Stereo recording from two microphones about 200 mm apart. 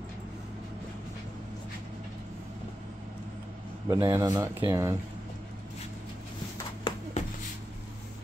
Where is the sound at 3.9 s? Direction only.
20° right (ahead or behind).